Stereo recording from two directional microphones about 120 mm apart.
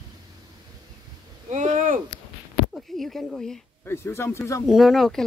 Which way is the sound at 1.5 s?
85° right.